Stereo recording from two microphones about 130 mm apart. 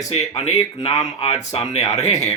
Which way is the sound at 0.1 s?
55° left (ahead or behind).